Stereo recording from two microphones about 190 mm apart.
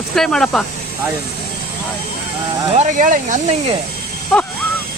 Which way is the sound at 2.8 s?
40° right (ahead or behind).